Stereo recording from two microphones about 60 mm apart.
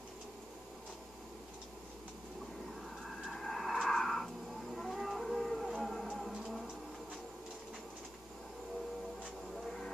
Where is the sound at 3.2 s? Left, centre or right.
Centre.